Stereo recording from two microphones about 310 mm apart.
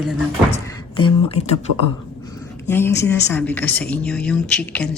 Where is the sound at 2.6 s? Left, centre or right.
Centre.